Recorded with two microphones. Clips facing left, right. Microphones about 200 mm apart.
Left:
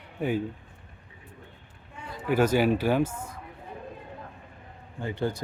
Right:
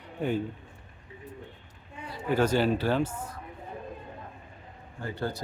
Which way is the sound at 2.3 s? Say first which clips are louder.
Left 2 dB; 10° left (ahead or behind).